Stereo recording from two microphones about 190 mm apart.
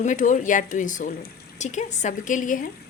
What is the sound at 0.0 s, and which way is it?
Speech, 40° left (ahead or behind).